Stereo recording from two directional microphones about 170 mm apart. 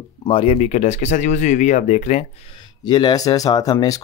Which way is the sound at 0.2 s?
30° left (ahead or behind).